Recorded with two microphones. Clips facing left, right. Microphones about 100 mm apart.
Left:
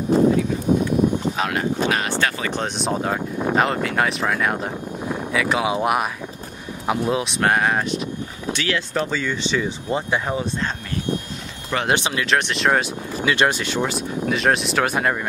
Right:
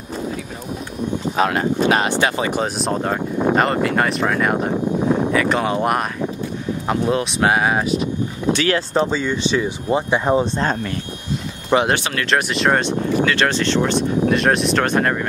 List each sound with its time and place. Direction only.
1.3 s speech: 40° right (ahead or behind)
1.9 s speech: 20° right (ahead or behind)
2.5 s speech: centre (ahead or behind)
8.5 s speech: 45° right (ahead or behind)
8.9 s speech: 20° right (ahead or behind)
11.7 s speech: 25° right (ahead or behind)
12.3 s speech: centre (ahead or behind)
13.2 s speech: 15° left (ahead or behind)